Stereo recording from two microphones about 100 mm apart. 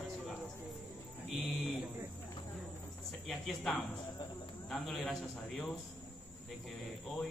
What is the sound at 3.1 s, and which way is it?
Music, centre (ahead or behind).